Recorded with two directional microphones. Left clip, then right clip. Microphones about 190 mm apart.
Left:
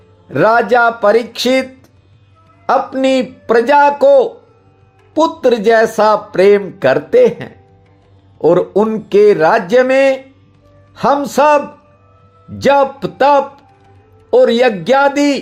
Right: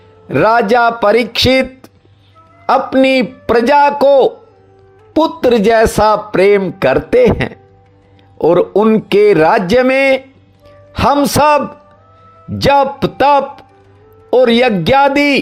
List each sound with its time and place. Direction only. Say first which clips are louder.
0.3 s speech: even; 30° right (ahead or behind)